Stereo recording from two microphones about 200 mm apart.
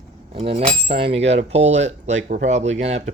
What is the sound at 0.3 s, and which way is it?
Speech, 30° right (ahead or behind).